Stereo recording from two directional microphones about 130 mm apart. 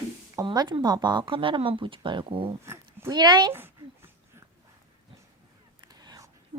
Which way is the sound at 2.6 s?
20° right (ahead or behind).